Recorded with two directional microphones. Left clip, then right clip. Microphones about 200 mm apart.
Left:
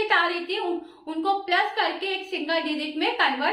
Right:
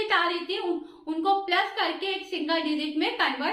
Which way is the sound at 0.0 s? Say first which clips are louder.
Left 3 dB; 10° left (ahead or behind).